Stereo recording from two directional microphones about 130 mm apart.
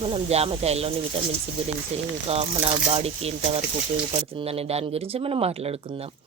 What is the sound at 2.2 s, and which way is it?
A woman's voice, 50° right (ahead or behind).